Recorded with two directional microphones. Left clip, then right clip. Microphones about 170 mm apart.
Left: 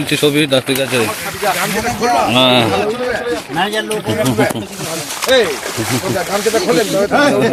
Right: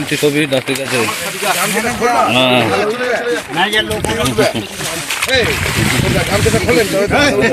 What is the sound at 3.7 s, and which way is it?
Speech, 45° left (ahead or behind).